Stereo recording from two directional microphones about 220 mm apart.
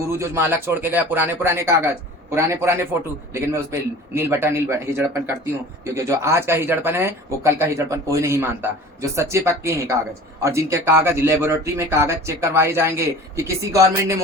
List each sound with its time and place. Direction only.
0.0 s speech: 10° right (ahead or behind)